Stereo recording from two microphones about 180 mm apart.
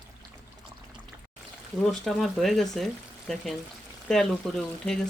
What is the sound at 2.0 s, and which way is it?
Speech, centre (ahead or behind).